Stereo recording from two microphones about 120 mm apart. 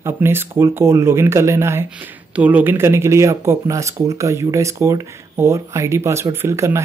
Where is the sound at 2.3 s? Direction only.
10° right (ahead or behind).